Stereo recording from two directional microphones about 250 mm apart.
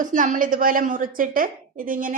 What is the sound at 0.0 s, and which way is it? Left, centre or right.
A woman's voice, right.